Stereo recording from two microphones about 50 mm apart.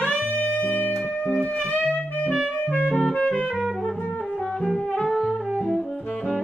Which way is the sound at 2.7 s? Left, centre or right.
Left.